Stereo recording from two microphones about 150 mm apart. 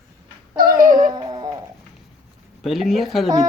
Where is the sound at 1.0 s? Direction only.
30° right (ahead or behind).